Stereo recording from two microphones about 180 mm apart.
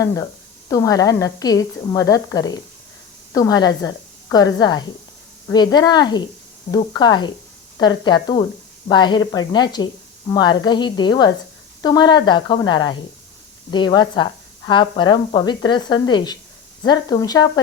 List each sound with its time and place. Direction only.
0.7 s a woman's voice: 20° left (ahead or behind)